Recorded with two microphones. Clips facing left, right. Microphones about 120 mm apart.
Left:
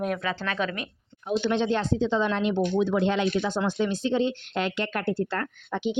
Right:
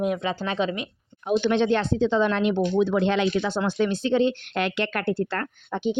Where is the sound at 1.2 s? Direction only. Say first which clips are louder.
Right 4 dB; 65° right (ahead or behind).